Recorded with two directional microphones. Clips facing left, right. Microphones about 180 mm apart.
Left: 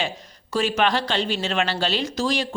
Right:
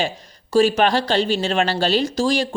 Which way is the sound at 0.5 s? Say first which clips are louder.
Right 6 dB; 35° right (ahead or behind).